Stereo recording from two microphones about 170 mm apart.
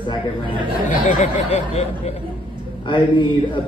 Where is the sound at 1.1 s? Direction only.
45° left (ahead or behind).